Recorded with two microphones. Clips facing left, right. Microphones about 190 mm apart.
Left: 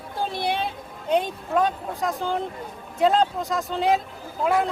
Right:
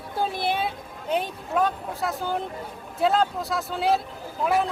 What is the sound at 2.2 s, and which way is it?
Speech, 5° right (ahead or behind).